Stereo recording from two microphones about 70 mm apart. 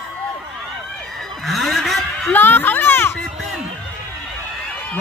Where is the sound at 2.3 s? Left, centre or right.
Left.